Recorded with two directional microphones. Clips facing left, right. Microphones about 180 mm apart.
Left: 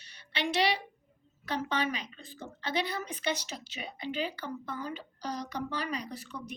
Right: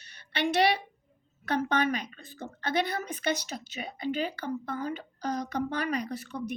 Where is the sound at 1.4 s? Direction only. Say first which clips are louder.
Right 5 dB; 55° right (ahead or behind).